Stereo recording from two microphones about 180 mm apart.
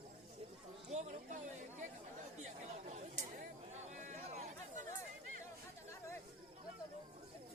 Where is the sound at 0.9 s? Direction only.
40° right (ahead or behind).